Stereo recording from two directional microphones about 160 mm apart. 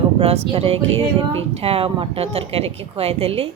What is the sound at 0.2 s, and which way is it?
Speech, 35° right (ahead or behind).